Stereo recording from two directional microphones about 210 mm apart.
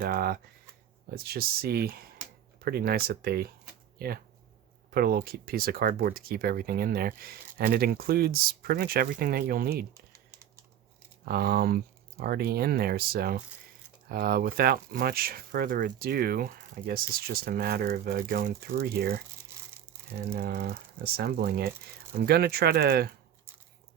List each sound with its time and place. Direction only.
0.0 s speech: 45° right (ahead or behind)
11.3 s speech: 45° right (ahead or behind)
20.3 s speech: 45° right (ahead or behind)